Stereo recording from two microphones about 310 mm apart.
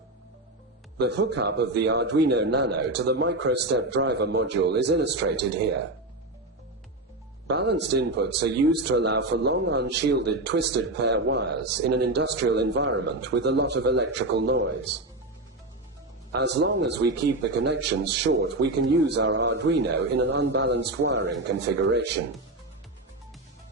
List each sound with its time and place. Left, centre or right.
0.9 s speech: right
7.4 s speech: right
16.3 s speech: right